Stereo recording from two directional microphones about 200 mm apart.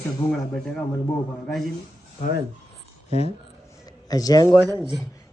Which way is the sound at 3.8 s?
20° left (ahead or behind).